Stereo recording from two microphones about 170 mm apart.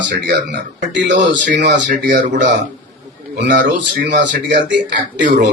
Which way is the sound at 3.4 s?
90° right.